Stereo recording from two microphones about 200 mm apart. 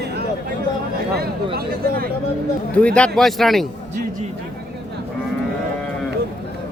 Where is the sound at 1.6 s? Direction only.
50° right (ahead or behind).